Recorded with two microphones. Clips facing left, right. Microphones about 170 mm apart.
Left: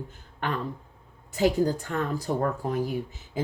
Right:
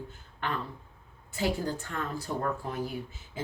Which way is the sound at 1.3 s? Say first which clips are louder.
Left 7 dB; 40° left (ahead or behind).